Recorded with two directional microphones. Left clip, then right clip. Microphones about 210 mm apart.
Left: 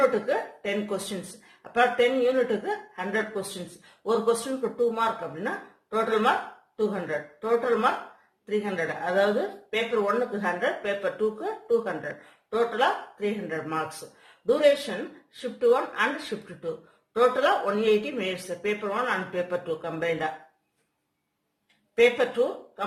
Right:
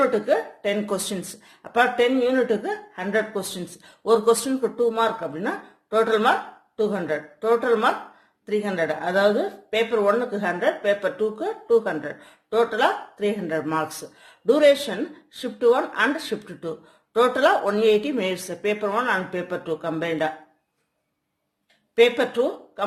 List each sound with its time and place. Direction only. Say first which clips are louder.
0.0 s speech: right 3 dB; 55° right (ahead or behind)
7.4 s speech: right 4 dB; 55° right (ahead or behind)
12.5 s speech: right 4 dB; 50° right (ahead or behind)
21.9 s speech: right 3 dB; 55° right (ahead or behind)